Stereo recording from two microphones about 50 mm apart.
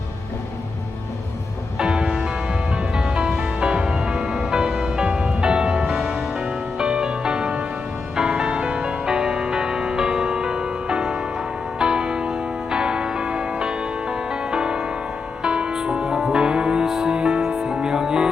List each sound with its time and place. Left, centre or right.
1.8 s music: centre